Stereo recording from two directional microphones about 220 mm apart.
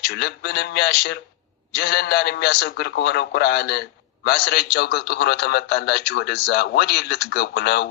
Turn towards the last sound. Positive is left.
turn(degrees=50)  # may be behind; listen again after turning